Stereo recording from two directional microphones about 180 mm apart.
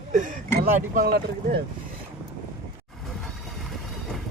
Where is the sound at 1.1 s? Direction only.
60° right (ahead or behind).